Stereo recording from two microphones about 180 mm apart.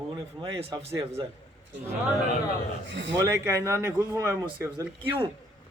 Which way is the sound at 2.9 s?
90° right.